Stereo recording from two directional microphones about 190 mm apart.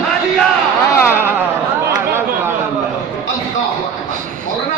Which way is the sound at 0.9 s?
10° left (ahead or behind).